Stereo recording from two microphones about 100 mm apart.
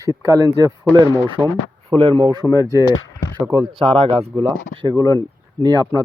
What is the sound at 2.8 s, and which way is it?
Speech, 40° left (ahead or behind).